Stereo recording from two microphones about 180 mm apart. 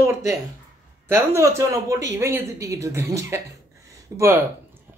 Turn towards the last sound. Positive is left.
turn(degrees=-15)  # may be behind; listen again after turning